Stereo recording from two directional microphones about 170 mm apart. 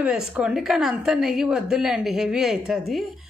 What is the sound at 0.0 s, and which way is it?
A woman's voice, 5° right (ahead or behind).